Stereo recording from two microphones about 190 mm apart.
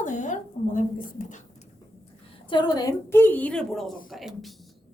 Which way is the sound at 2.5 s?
25° left (ahead or behind).